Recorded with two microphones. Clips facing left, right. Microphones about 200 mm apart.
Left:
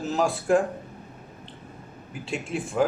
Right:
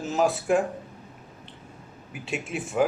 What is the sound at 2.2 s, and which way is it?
Speech, 5° right (ahead or behind).